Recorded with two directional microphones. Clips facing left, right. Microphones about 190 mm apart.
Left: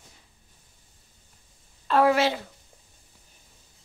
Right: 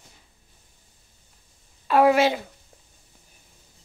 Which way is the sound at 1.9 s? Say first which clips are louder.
Right 3 dB; 15° right (ahead or behind).